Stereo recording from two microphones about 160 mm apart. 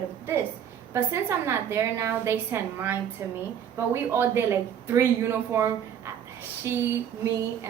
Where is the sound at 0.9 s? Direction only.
15° right (ahead or behind).